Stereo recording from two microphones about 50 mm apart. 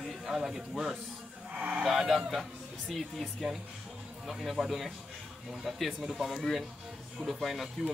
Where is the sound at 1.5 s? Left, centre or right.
Right.